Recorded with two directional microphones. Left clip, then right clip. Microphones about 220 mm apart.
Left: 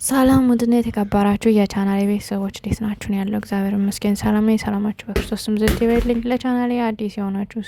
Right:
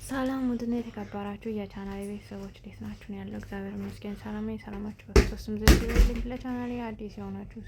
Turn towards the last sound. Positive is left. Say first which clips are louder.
# left 15 dB
turn(degrees=45)  # may be behind; listen again after turning